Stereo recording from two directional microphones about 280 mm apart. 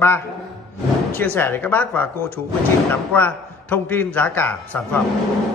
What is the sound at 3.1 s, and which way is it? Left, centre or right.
A man's voice, centre.